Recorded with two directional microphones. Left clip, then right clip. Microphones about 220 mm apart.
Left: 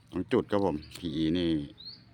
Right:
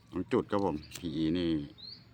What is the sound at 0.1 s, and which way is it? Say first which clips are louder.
Speech: left 3 dB; 20° left (ahead or behind).